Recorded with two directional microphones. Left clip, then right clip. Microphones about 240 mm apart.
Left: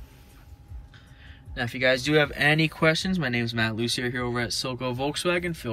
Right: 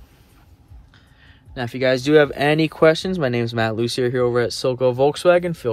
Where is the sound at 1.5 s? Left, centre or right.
Centre.